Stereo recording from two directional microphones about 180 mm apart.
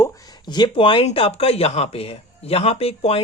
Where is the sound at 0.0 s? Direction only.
20° left (ahead or behind).